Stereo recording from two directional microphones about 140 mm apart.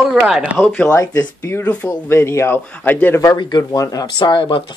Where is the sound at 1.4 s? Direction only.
15° left (ahead or behind).